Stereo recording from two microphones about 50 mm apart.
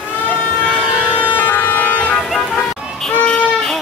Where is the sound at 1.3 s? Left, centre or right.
Left.